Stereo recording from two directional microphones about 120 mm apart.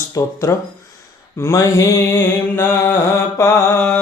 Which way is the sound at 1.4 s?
25° left (ahead or behind).